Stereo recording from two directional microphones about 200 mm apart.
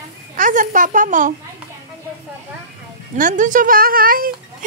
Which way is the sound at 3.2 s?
40° right (ahead or behind).